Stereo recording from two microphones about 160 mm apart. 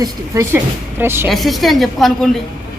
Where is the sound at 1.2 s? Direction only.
Centre (ahead or behind).